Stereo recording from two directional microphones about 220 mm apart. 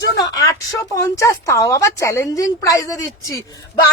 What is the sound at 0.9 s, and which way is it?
A woman's voice, 15° left (ahead or behind).